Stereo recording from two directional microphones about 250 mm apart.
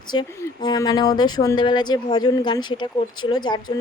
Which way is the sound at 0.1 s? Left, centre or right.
Centre.